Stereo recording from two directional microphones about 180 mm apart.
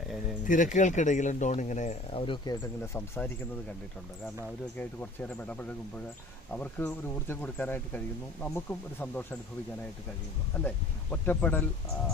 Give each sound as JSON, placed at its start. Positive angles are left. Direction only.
{"t": 0.4, "sound": "speech", "side_deg": 45}
{"t": 4.8, "sound": "speech", "side_deg": 10}
{"t": 11.1, "sound": "speech", "side_deg": 10}